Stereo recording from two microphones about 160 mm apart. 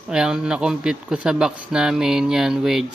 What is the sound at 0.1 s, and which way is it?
Speech, 5° right (ahead or behind).